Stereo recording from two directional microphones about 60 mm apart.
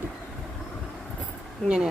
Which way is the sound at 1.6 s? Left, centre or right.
Centre.